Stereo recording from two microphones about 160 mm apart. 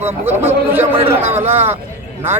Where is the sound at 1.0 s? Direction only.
45° right (ahead or behind).